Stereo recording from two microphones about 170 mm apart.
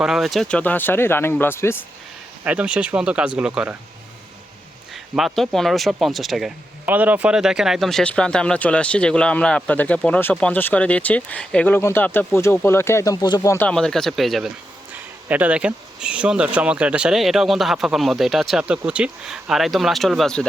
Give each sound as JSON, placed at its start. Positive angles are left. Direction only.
{"t": 0.0, "sound": "speech", "side_deg": 0}
{"t": 2.4, "sound": "speech", "side_deg": -10}
{"t": 5.1, "sound": "speech", "side_deg": 0}
{"t": 13.7, "sound": "speech", "side_deg": 5}